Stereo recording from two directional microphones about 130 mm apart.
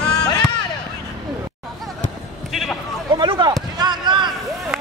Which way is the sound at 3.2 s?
35° right (ahead or behind).